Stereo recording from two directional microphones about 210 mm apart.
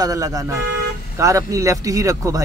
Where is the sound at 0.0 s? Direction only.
15° right (ahead or behind).